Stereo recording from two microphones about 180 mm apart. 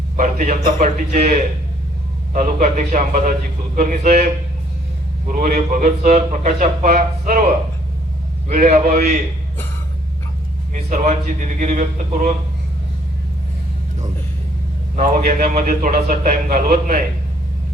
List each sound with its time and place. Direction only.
0.2 s speech: 50° right (ahead or behind)
5.3 s speech: 45° right (ahead or behind)
10.8 s speech: 40° right (ahead or behind)
14.9 s speech: 45° right (ahead or behind)